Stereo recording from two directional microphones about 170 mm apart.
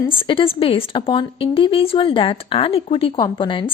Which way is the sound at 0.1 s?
30° left (ahead or behind).